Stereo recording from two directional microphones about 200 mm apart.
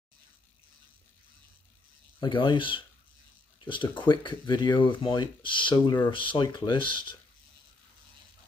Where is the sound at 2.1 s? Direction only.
25° left (ahead or behind).